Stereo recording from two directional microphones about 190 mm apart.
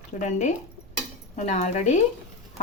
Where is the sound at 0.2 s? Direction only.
40° left (ahead or behind).